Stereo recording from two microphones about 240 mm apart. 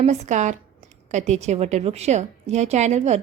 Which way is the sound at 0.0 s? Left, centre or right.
Right.